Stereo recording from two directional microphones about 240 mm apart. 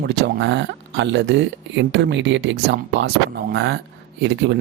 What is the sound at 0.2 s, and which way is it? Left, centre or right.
Speech, right.